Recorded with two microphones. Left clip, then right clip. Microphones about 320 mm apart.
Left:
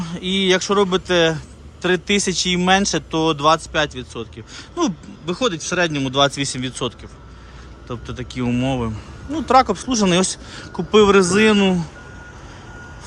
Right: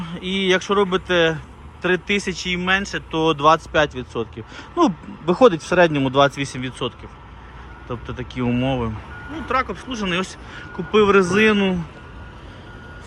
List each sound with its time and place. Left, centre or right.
0.0 s speech: centre